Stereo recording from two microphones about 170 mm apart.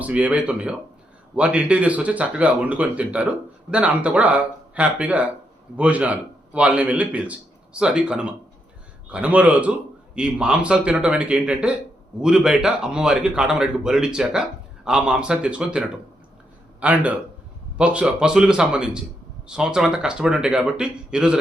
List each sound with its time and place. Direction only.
0.0 s speech: 10° right (ahead or behind)
16.8 s speech: 10° right (ahead or behind)